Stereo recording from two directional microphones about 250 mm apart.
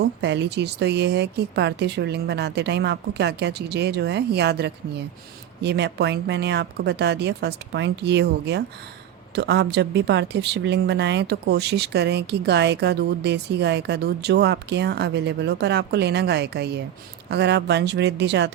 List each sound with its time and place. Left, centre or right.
0.0 s speech: right